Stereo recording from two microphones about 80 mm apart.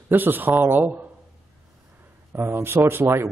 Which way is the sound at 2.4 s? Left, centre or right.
Right.